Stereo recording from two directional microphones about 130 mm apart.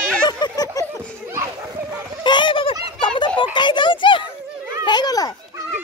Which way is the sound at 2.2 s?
35° left (ahead or behind).